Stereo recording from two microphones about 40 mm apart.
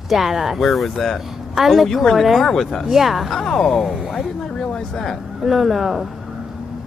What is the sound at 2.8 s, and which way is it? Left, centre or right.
Speech, centre.